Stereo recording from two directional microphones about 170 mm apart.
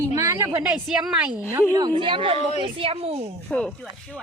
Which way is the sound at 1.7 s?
25° right (ahead or behind).